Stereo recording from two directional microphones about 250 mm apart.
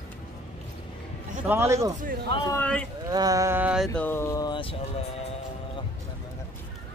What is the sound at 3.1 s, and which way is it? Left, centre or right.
Speech, centre.